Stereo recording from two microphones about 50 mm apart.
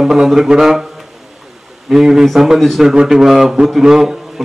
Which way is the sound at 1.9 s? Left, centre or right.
Centre.